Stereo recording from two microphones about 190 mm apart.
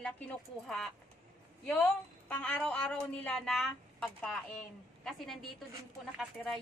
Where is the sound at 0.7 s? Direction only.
Centre (ahead or behind).